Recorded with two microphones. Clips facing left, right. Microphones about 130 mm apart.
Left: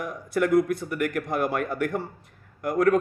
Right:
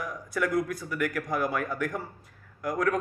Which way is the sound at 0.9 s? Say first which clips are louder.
Left 3 dB; 55° left (ahead or behind).